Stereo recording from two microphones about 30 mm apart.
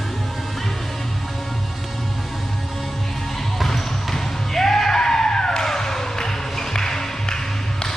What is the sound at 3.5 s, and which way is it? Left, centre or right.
Basketball bounce, centre.